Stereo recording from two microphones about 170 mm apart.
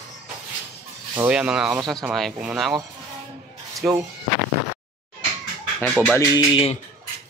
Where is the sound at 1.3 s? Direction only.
5° right (ahead or behind).